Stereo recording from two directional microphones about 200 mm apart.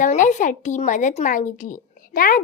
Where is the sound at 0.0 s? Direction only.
35° left (ahead or behind).